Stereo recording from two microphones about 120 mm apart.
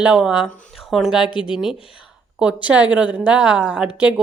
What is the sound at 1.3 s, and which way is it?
Speech, 45° left (ahead or behind).